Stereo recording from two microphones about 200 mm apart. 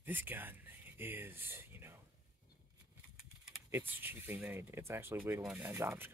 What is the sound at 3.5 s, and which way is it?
Speech, 5° right (ahead or behind).